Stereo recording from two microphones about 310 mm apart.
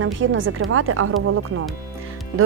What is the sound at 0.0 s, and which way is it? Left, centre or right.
Speech, right.